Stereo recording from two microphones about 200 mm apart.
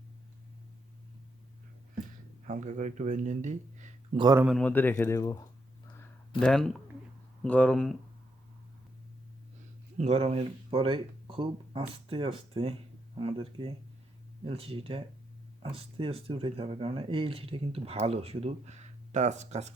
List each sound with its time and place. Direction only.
2.5 s speech: 35° right (ahead or behind)
4.2 s speech: 20° right (ahead or behind)
4.4 s speech: 5° left (ahead or behind)
6.4 s speech: 5° left (ahead or behind)
10.0 s speech: 30° right (ahead or behind)